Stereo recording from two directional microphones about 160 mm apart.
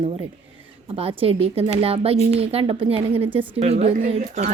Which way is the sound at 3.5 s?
40° right (ahead or behind).